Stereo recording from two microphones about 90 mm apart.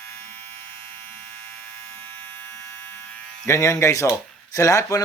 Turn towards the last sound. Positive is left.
turn(degrees=35)  # may be behind; listen again after turning